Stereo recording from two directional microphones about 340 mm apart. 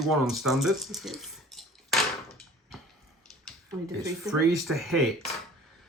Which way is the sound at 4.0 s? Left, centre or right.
Centre.